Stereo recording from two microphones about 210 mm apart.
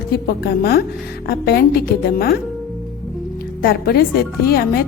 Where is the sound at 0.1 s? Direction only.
50° left (ahead or behind).